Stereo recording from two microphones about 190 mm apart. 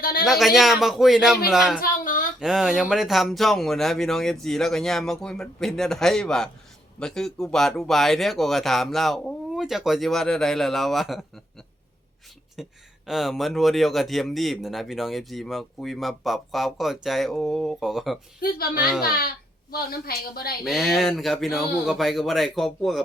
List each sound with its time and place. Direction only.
0.0 s a sound: 50° left (ahead or behind)
0.3 s speech: centre (ahead or behind)
1.8 s a sound: 45° left (ahead or behind)
2.4 s speech: 5° right (ahead or behind)
12.6 s speech: centre (ahead or behind)
18.3 s a woman's voice: 50° left (ahead or behind)
20.7 s speech: centre (ahead or behind)